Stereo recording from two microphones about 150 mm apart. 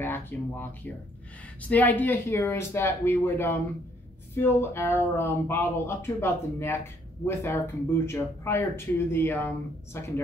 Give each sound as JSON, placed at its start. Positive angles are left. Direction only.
{"t": 0.0, "sound": "speech", "side_deg": 15}